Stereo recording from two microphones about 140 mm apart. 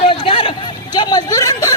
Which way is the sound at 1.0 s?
25° left (ahead or behind).